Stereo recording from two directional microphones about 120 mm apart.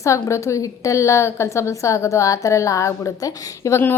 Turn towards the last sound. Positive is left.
turn(degrees=20)  # may be behind; listen again after turning